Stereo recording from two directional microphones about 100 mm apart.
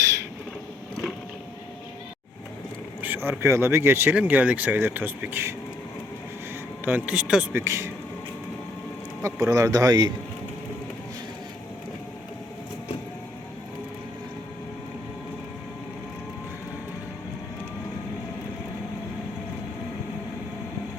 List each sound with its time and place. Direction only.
3.0 s speech: 20° right (ahead or behind)
6.8 s speech: 15° right (ahead or behind)
7.5 s speech: 30° right (ahead or behind)
9.2 s speech: 35° right (ahead or behind)